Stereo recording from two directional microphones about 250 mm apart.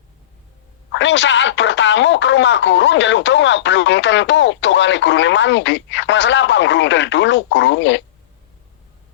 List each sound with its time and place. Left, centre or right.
0.9 s speech: left